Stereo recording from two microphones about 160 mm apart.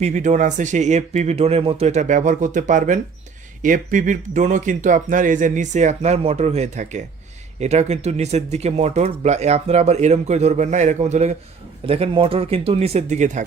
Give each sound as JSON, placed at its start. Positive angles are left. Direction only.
{"t": 0.0, "sound": "speech", "side_deg": -50}